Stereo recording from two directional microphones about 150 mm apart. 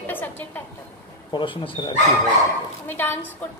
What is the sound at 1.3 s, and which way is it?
Speech, 35° left (ahead or behind).